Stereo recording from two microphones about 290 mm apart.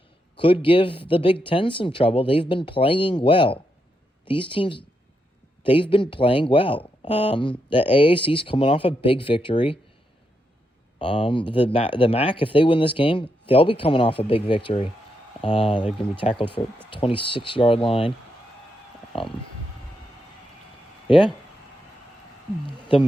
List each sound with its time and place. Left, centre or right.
0.3 s speech: centre
11.0 s speech: centre
21.1 s speech: centre
22.6 s speech: centre